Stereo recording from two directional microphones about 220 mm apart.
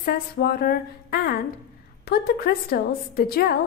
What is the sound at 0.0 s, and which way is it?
A woman's voice, 45° left (ahead or behind).